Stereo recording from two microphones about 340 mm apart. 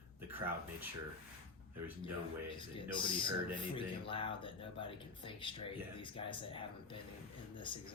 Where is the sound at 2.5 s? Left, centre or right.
Centre.